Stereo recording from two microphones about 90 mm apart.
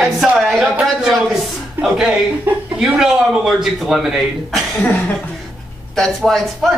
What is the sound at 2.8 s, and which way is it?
A man's voice, 5° right (ahead or behind).